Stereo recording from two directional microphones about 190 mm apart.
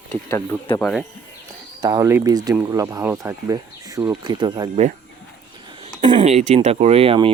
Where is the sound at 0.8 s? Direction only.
5° left (ahead or behind).